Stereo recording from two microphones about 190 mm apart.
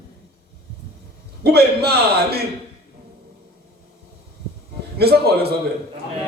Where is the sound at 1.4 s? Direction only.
55° right (ahead or behind).